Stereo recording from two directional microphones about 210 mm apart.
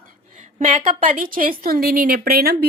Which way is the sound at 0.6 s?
40° right (ahead or behind).